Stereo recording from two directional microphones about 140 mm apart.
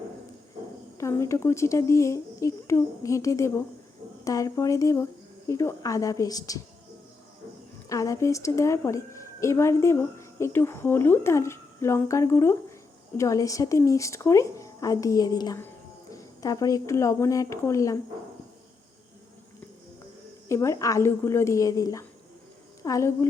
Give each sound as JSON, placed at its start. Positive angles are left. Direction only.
{"t": 0.9, "sound": "a woman's voice", "side_deg": 20}
{"t": 7.9, "sound": "a woman's voice", "side_deg": 25}
{"t": 20.5, "sound": "a woman's voice", "side_deg": 20}